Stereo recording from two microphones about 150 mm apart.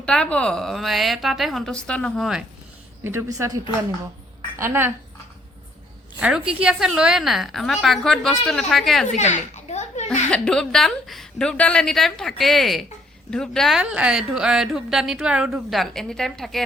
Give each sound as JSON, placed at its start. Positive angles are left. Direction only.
{"t": 0.0, "sound": "a woman's voice", "side_deg": 5}
{"t": 3.0, "sound": "a woman's voice", "side_deg": -15}
{"t": 6.1, "sound": "a woman's voice", "side_deg": -5}
{"t": 9.0, "sound": "a sound", "side_deg": 50}
{"t": 10.1, "sound": "a woman's voice", "side_deg": 5}